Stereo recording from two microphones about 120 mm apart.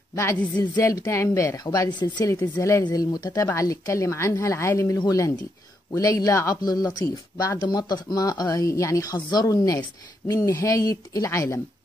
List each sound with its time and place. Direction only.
0.1 s a woman's voice: 25° left (ahead or behind)
2.4 s speech: 20° left (ahead or behind)
2.8 s speech: 35° left (ahead or behind)